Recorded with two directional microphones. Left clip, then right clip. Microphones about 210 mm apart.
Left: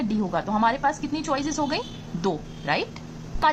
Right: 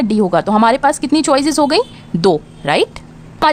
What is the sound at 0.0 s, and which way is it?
A woman's voice, 50° right (ahead or behind).